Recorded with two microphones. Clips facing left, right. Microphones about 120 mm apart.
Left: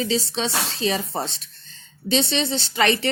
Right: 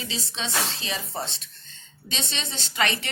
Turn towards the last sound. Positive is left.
turn(degrees=35)  # may be behind; listen again after turning